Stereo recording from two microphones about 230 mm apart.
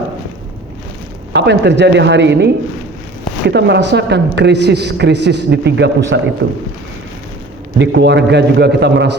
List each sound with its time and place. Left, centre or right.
1.3 s a man's voice: right
3.5 s a man's voice: right
7.8 s a man's voice: right